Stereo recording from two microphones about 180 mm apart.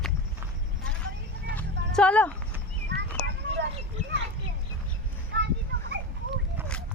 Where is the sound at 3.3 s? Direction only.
70° right (ahead or behind).